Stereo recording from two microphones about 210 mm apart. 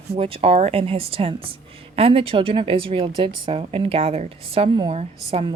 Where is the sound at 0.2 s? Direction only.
25° right (ahead or behind).